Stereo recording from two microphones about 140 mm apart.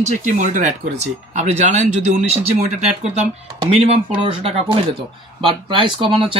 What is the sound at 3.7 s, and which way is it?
Speech, 50° right (ahead or behind).